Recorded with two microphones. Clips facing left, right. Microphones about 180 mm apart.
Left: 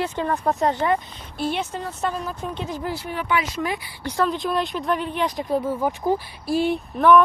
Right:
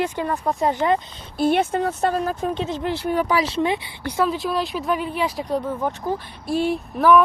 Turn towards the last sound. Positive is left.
turn(degrees=-5)  # may be behind; listen again after turning